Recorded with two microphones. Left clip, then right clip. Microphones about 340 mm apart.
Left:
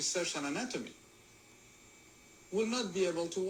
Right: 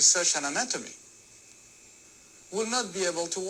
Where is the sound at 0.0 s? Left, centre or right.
Centre.